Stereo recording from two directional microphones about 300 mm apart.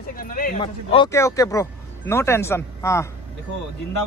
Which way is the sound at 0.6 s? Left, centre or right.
Centre.